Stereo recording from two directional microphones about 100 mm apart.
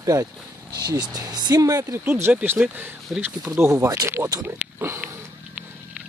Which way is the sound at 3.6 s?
30° right (ahead or behind).